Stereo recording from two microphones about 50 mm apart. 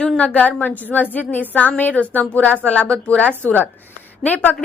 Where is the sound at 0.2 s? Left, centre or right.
Left.